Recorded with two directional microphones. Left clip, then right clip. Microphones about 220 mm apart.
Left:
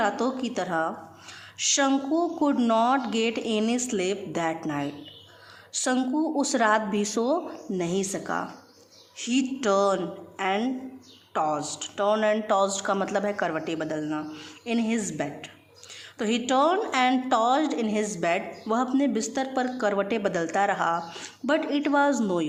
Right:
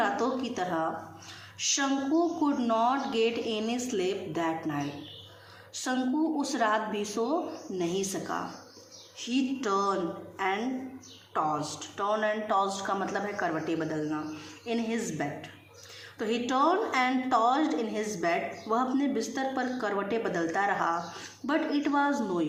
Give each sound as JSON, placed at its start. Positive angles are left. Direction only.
{"t": 0.0, "sound": "a woman's voice", "side_deg": 45}